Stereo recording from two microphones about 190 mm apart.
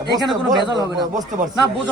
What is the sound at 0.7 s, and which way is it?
Speech, 20° right (ahead or behind).